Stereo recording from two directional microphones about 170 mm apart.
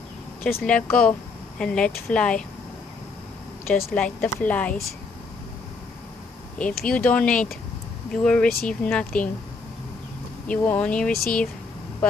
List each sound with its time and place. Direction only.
0.4 s speech: 5° left (ahead or behind)
3.9 s speech: 5° left (ahead or behind)
6.6 s speech: 5° left (ahead or behind)
10.4 s speech: 10° left (ahead or behind)
11.1 s speech: 60° left (ahead or behind)